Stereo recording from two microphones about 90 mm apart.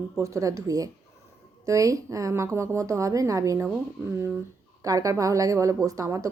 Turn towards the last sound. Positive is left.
turn(degrees=-35)  # may be behind; listen again after turning